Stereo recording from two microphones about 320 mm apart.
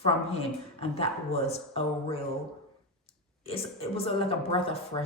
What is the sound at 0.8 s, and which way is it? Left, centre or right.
Speech, centre.